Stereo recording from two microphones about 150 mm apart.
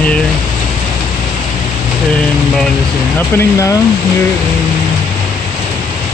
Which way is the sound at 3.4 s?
20° left (ahead or behind).